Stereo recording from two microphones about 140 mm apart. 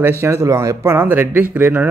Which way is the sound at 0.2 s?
20° right (ahead or behind).